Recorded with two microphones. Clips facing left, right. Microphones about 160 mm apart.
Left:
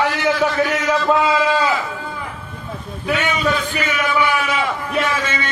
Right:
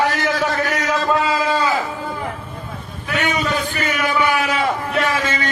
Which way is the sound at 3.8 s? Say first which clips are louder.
Even; 40° right (ahead or behind).